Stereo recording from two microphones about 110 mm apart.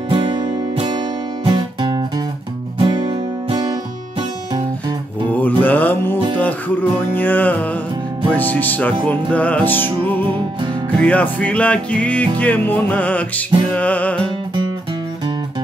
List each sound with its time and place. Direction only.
0.1 s music: 50° right (ahead or behind)
2.8 s music: 50° right (ahead or behind)
5.3 s mantra: 15° left (ahead or behind)
6.3 s music: 15° left (ahead or behind)